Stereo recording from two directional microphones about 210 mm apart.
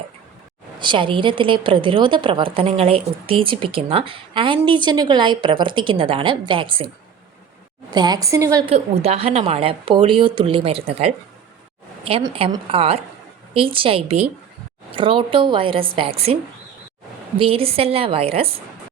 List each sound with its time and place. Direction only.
0.8 s a woman's voice: 25° right (ahead or behind)
7.9 s a woman's voice: 20° right (ahead or behind)
8.6 s a woman's voice: 30° right (ahead or behind)
12.3 s a woman's voice: 25° right (ahead or behind)